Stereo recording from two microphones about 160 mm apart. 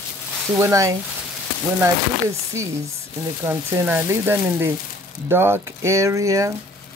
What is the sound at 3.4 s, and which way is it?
Speech, 15° right (ahead or behind).